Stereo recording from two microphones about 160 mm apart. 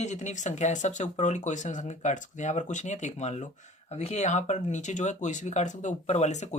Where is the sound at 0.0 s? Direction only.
50° left (ahead or behind).